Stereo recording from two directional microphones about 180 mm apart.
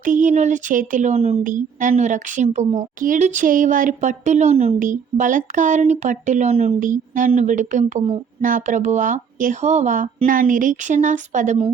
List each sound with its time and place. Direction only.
0.0 s speech: 45° right (ahead or behind)
1.5 s speech: 45° right (ahead or behind)
4.8 s speech: 45° right (ahead or behind)